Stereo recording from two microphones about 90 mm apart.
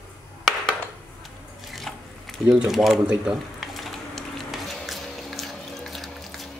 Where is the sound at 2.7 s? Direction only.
Centre (ahead or behind).